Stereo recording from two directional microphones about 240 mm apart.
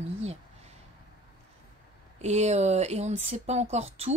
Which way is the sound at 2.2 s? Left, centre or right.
Right.